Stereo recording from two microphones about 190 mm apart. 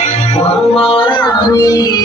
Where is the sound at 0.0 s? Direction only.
30° left (ahead or behind).